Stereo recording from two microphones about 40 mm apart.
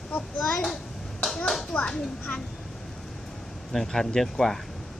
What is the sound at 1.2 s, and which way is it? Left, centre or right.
Clapping, centre.